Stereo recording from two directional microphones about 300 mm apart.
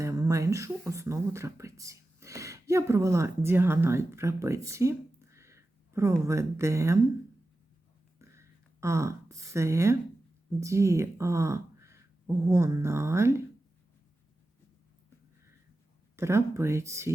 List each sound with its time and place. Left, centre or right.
0.0 s speech: centre
8.2 s a sound: centre
10.6 s speech: centre
16.1 s speech: centre